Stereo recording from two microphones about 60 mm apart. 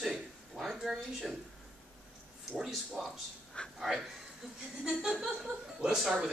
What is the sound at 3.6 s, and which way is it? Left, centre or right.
Speech, centre.